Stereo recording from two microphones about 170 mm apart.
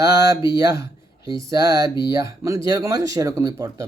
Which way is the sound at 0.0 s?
20° right (ahead or behind).